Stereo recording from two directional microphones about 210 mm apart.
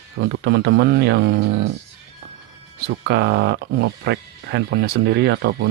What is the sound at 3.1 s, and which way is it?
Speech, 55° right (ahead or behind).